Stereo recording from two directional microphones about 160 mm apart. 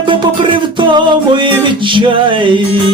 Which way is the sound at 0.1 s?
30° right (ahead or behind).